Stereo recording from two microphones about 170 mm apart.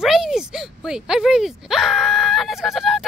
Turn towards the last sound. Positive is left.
turn(degrees=0)  # may be behind; listen again after turning